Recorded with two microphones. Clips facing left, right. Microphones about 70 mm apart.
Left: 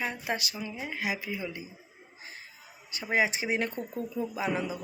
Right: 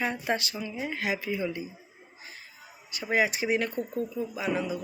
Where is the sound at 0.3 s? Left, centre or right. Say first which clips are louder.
Right 3 dB; centre.